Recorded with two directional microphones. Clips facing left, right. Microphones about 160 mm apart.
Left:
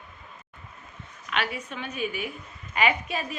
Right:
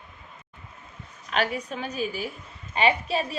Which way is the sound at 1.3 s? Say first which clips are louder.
Right 4 dB; 40° right (ahead or behind).